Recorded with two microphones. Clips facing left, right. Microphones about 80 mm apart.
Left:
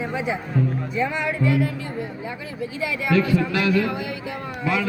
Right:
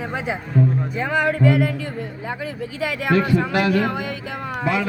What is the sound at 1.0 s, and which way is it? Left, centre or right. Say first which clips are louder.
Speech: right 5 dB; right.